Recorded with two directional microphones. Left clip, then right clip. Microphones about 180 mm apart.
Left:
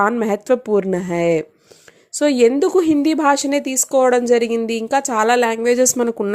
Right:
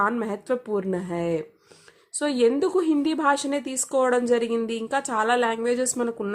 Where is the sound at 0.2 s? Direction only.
35° left (ahead or behind).